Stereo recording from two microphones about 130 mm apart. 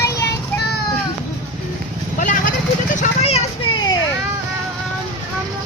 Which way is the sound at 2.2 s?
75° left (ahead or behind).